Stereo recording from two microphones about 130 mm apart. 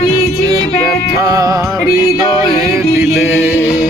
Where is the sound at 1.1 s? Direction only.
25° right (ahead or behind).